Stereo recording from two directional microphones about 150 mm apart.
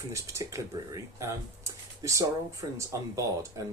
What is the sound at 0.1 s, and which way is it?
Speech, 20° right (ahead or behind).